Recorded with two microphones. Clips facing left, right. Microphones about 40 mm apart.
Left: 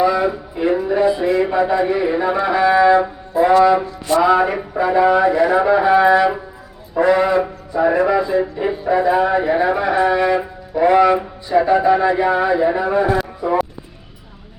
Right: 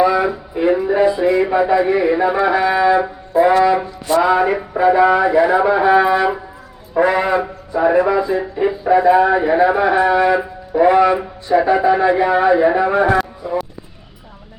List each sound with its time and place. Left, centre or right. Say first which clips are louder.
0.0 s a sound: right 1 dB; centre
1.1 s a man's voice: right 2 dB; centre
13.4 s speech: left 3 dB; centre